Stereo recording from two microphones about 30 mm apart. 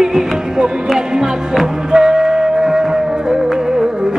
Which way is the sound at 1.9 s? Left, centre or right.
Centre.